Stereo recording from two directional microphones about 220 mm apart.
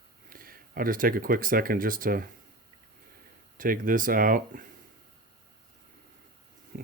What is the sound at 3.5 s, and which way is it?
Speech, 40° right (ahead or behind).